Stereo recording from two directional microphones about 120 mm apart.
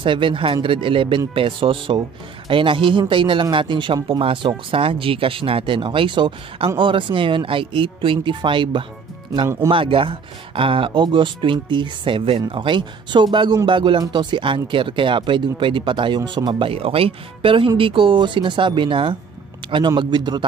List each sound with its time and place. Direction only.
0.0 s speech: 45° right (ahead or behind)